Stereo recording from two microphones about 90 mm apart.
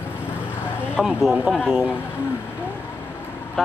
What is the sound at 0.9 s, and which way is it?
Speech, 15° right (ahead or behind).